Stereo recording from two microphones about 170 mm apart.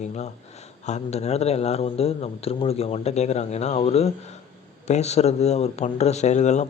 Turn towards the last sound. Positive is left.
turn(degrees=45)  # may be behind; listen again after turning